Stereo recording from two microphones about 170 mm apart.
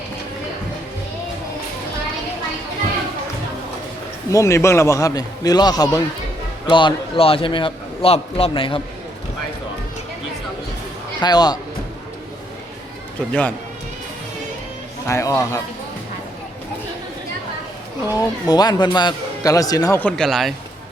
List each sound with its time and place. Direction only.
4.3 s a man's voice: 20° left (ahead or behind)
11.2 s speech: 25° left (ahead or behind)
15.0 s speech: 15° left (ahead or behind)
18.1 s speech: 25° left (ahead or behind)
20.0 s speech: 5° left (ahead or behind)